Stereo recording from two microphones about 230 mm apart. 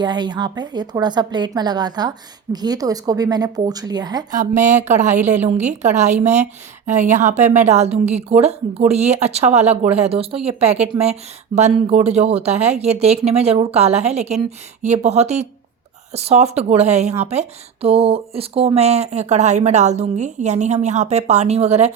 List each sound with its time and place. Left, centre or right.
0.0 s a woman's voice: centre
4.4 s a woman's voice: right